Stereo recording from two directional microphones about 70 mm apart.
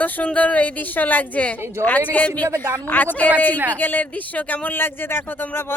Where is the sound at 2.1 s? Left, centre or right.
Left.